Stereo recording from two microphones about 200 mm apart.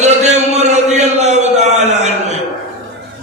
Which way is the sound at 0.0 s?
35° right (ahead or behind).